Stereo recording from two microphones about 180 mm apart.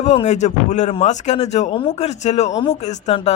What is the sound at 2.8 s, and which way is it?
Speech, 40° left (ahead or behind).